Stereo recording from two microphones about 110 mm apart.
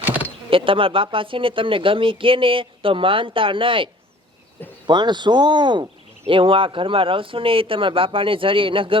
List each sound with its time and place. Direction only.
0.5 s speech: 55° right (ahead or behind)
4.9 s speech: 45° right (ahead or behind)